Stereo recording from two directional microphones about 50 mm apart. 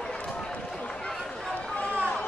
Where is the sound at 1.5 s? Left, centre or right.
Left.